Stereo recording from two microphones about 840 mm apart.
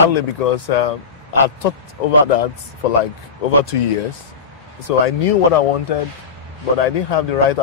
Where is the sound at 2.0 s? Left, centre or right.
Left.